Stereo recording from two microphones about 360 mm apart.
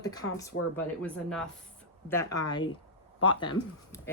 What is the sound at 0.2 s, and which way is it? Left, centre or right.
Speech, left.